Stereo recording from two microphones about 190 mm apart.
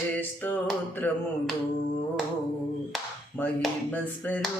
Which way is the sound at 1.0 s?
10° left (ahead or behind).